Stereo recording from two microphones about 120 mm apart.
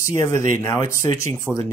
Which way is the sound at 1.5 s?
10° left (ahead or behind).